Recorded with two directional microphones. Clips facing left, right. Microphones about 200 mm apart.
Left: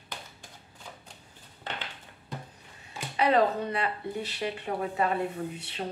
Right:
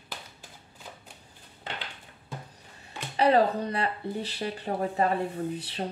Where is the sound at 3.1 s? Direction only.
35° right (ahead or behind).